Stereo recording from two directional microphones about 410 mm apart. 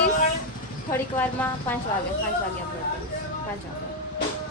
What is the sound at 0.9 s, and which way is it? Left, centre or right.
Speech, centre.